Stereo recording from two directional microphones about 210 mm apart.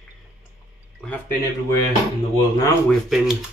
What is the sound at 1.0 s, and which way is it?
Speech, 10° left (ahead or behind).